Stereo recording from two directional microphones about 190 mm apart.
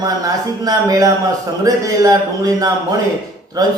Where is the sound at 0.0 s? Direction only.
20° right (ahead or behind).